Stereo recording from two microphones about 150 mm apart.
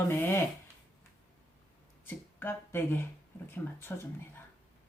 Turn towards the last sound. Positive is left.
turn(degrees=15)  # may be behind; listen again after turning